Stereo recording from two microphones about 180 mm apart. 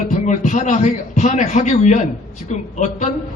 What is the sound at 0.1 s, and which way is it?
A man's voice, 45° left (ahead or behind).